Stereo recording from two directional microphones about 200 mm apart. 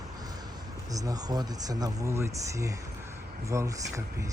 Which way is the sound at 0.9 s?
20° right (ahead or behind).